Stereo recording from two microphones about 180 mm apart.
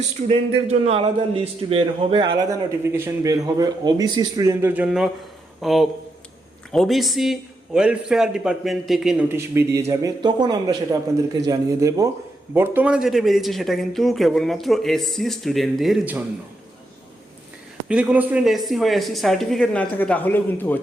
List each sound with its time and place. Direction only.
0.2 s a man's voice: 35° right (ahead or behind); by 9.2 s centre (ahead or behind)
9.3 s a man's voice: 15° right (ahead or behind)
17.8 s a man's voice: 5° right (ahead or behind); by 20.7 s 10° left (ahead or behind)